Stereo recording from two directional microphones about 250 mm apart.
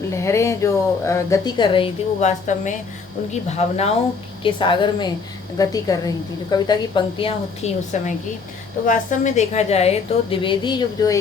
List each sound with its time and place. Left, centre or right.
0.1 s a woman's voice: centre